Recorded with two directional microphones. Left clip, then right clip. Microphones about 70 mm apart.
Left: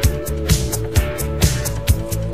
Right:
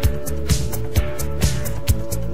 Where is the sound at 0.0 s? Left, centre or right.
Right.